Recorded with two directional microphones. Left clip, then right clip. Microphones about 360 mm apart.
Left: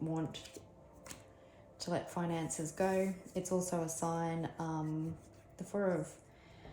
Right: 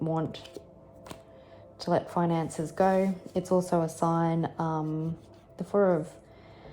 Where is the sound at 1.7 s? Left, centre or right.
Right.